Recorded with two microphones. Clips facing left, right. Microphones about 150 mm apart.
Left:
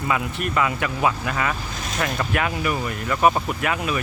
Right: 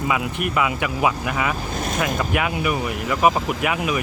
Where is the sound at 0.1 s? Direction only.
15° right (ahead or behind).